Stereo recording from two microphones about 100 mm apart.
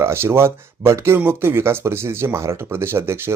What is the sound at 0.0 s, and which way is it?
Speech, 25° right (ahead or behind).